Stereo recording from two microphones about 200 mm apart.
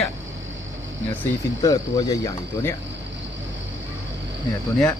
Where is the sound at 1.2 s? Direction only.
20° left (ahead or behind).